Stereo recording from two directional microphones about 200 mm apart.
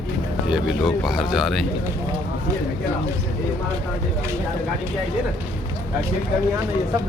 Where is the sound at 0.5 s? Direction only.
Centre (ahead or behind).